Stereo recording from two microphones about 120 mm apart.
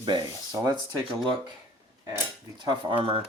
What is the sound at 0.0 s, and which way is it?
Speech, 35° right (ahead or behind).